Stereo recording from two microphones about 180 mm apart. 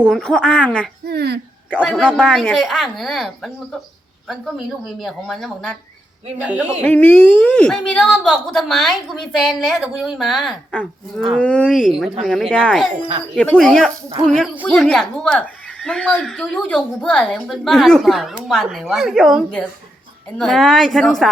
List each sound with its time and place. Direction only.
0.0 s a woman's voice: centre (ahead or behind)
1.0 s a sound: 65° right (ahead or behind)
1.7 s a woman's voice: 5° left (ahead or behind)
6.8 s a woman's voice: 10° left (ahead or behind)